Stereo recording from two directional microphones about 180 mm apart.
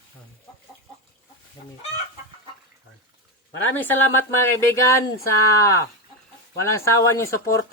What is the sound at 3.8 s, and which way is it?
Speech, 10° left (ahead or behind).